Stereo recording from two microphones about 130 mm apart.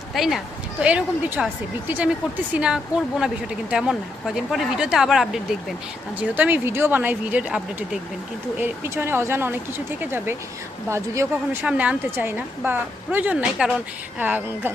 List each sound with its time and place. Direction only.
0.1 s speech: centre (ahead or behind)
6.2 s speech: 15° right (ahead or behind)
11.6 s speech: 10° right (ahead or behind)